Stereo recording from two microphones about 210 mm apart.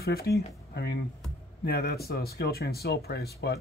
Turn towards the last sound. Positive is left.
turn(degrees=50)  # may be behind; listen again after turning